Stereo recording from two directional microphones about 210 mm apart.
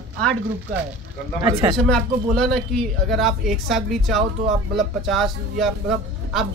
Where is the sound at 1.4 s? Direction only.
20° right (ahead or behind).